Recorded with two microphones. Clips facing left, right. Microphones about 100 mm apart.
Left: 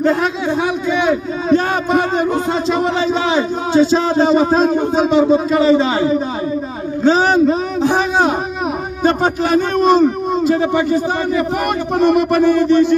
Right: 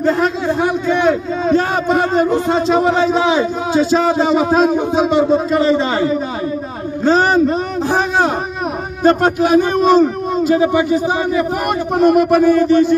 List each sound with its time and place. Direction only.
0.0 s a man's voice: centre (ahead or behind)
7.1 s a man's voice: centre (ahead or behind)